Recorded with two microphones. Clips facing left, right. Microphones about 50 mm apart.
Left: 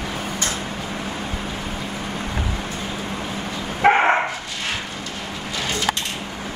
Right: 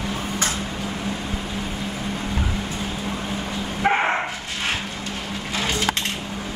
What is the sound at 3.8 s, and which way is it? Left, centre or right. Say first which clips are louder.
Dog: left 5 dB; left.